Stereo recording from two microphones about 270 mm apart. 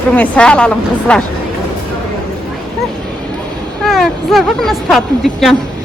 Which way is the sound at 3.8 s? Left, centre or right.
Centre.